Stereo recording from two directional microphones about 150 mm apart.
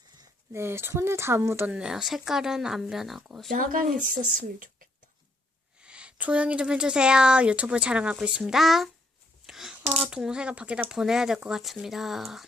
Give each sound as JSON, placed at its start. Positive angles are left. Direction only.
{"t": 0.2, "sound": "speech", "side_deg": -15}
{"t": 3.5, "sound": "speech", "side_deg": -65}
{"t": 5.8, "sound": "speech", "side_deg": -5}
{"t": 9.5, "sound": "a sound", "side_deg": 0}
{"t": 9.9, "sound": "speech", "side_deg": -5}